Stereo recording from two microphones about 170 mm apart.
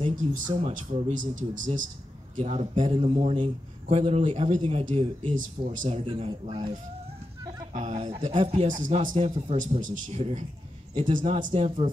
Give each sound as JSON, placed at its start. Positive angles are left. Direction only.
{"t": 0.1, "sound": "speech", "side_deg": -50}
{"t": 2.3, "sound": "a man's voice", "side_deg": -35}
{"t": 7.7, "sound": "a man's voice", "side_deg": -45}
{"t": 8.6, "sound": "a man's voice", "side_deg": -50}